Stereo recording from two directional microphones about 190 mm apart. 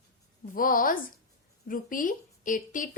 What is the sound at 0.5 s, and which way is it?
A woman's voice, 45° left (ahead or behind).